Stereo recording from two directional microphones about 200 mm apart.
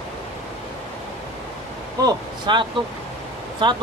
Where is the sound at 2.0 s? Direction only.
20° right (ahead or behind).